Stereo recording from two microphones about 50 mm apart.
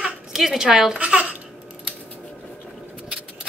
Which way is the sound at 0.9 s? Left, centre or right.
Right.